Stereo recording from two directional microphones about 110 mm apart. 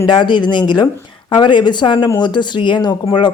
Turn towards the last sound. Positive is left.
turn(degrees=40)  # may be behind; listen again after turning